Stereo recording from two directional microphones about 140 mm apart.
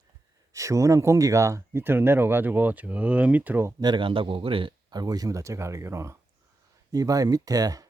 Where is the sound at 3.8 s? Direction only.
35° right (ahead or behind).